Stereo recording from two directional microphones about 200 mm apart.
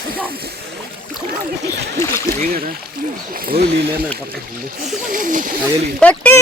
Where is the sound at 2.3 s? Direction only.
45° right (ahead or behind).